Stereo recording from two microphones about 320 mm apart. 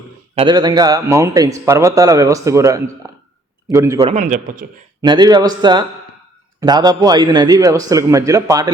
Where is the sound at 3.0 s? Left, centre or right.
Centre.